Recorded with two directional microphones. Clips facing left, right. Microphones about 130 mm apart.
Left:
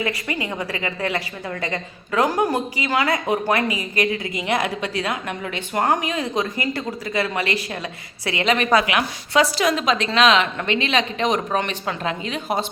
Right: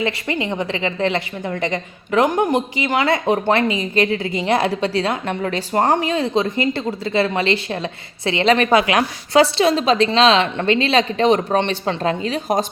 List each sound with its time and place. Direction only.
0.0 s a woman's voice: 25° right (ahead or behind)